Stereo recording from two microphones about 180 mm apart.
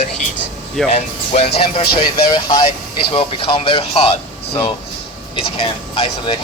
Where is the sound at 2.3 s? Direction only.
25° left (ahead or behind).